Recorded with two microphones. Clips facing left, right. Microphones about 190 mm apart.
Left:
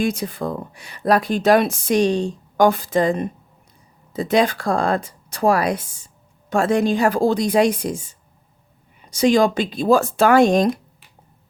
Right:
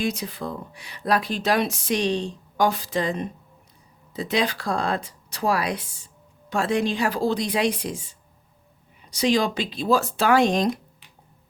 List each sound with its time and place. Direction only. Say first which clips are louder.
0.0 s speech: left 5 dB; 50° left (ahead or behind)